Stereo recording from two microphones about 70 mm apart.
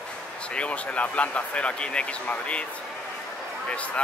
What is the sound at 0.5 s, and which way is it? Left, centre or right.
Speech, centre.